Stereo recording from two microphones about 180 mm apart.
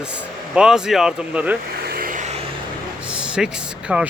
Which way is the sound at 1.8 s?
55° right (ahead or behind).